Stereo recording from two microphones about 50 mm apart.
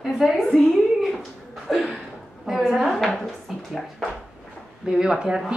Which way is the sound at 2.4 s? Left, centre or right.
Centre.